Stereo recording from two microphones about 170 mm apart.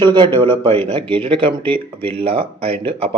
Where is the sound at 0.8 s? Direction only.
30° right (ahead or behind).